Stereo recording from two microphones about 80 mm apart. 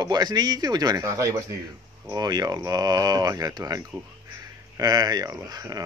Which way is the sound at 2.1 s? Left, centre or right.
Right.